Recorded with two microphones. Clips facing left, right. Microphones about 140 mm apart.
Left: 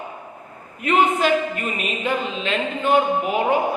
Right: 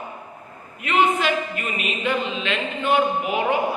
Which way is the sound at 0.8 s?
45° left (ahead or behind).